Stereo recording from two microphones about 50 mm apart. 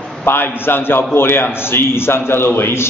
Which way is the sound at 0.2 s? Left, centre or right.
Left.